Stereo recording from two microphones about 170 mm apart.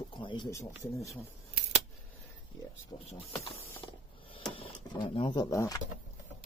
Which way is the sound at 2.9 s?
30° left (ahead or behind).